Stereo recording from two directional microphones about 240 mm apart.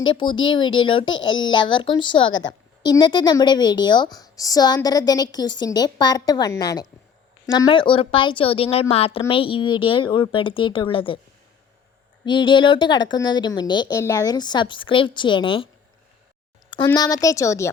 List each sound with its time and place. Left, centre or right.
0.1 s a woman's voice: centre
12.2 s a woman's voice: centre